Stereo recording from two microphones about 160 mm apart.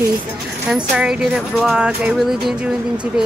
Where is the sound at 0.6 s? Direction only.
10° right (ahead or behind).